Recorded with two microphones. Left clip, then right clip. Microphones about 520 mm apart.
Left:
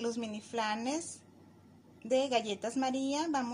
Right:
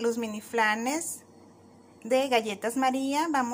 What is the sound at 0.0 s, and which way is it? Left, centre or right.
Speech, left.